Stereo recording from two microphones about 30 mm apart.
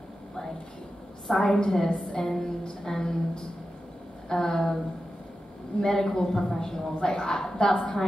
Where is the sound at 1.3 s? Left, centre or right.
Left.